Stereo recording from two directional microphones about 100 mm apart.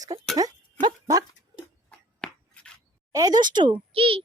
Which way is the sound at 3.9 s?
65° right (ahead or behind).